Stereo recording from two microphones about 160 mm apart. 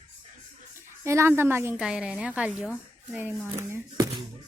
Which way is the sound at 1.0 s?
15° right (ahead or behind).